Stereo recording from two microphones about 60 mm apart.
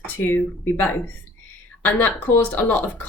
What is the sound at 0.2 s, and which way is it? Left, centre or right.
A woman's voice, left.